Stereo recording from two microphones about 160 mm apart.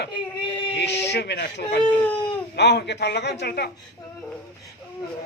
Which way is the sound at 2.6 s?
90° left.